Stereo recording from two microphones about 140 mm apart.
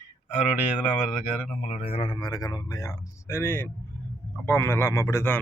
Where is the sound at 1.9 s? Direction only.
40° left (ahead or behind).